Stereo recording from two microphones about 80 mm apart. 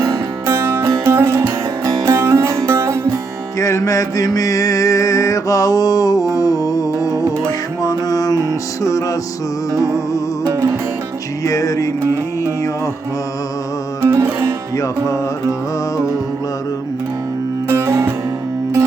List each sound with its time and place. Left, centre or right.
0.4 s music: right
3.6 s music: left
10.4 s music: right
11.4 s music: left
14.0 s music: right
14.8 s music: left
17.7 s music: right